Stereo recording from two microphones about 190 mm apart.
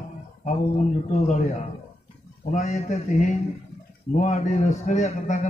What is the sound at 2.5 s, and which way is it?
A man's voice, 35° left (ahead or behind).